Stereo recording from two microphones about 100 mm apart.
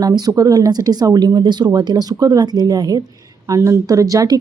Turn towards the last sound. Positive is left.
turn(degrees=-35)  # may be behind; listen again after turning